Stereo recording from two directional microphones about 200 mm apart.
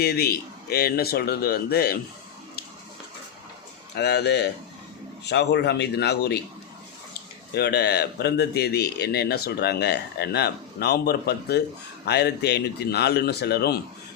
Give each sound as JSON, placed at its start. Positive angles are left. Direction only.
{"t": 0.0, "sound": "a man's voice", "side_deg": 50}
{"t": 3.9, "sound": "speech", "side_deg": 55}
{"t": 7.5, "sound": "a man's voice", "side_deg": 55}